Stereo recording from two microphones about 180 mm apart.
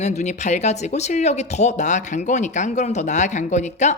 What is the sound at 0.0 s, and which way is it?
Speech, 40° left (ahead or behind).